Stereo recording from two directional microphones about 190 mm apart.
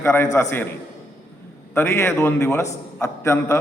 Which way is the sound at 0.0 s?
10° left (ahead or behind).